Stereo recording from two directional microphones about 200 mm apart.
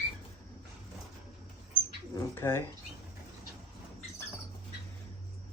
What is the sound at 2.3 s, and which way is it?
Bird, 10° left (ahead or behind).